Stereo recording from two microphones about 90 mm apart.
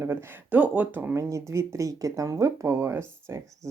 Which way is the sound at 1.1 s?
35° right (ahead or behind).